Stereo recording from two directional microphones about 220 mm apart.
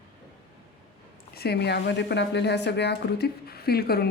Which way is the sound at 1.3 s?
45° left (ahead or behind).